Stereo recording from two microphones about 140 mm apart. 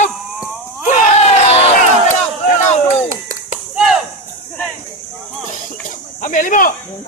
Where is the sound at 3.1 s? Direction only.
70° right (ahead or behind).